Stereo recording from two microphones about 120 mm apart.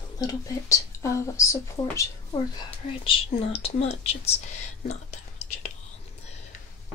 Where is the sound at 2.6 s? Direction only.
50° left (ahead or behind).